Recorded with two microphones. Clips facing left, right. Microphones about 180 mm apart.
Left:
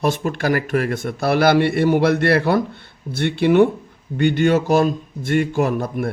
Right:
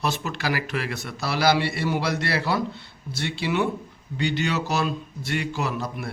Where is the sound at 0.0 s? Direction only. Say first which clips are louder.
Left 7 dB; 50° left (ahead or behind).